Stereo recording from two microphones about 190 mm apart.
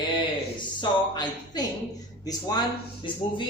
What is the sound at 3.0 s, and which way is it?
Speech, 25° left (ahead or behind).